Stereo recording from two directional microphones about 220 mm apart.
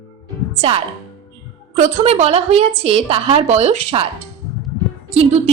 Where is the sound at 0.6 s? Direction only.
25° right (ahead or behind).